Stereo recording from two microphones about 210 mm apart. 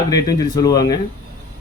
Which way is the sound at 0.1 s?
15° left (ahead or behind).